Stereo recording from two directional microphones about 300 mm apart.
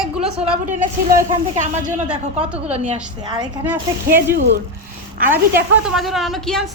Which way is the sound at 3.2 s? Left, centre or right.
Centre.